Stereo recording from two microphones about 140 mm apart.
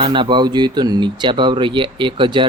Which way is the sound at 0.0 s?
35° right (ahead or behind).